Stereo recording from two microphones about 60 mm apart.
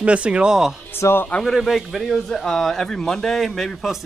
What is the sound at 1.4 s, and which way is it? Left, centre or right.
A man's voice, centre.